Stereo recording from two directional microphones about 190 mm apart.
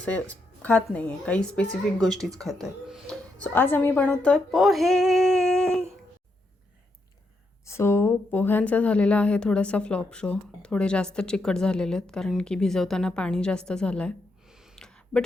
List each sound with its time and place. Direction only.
0.0 s a woman's voice: 5° left (ahead or behind)
7.6 s speech: 15° left (ahead or behind)